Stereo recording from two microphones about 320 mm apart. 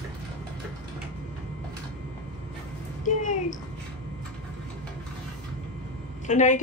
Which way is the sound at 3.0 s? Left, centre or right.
Left.